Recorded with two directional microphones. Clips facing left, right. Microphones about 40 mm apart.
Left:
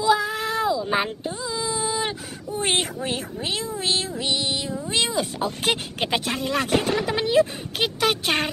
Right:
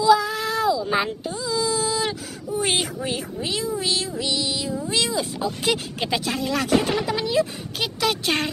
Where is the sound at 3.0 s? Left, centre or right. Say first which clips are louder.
Even; centre.